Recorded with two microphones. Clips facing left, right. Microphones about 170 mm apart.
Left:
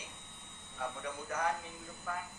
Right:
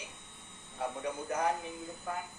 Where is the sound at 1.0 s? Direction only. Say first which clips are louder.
Right 4 dB; 20° right (ahead or behind).